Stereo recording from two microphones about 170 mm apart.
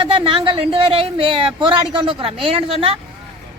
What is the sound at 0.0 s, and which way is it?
Speech, 30° right (ahead or behind).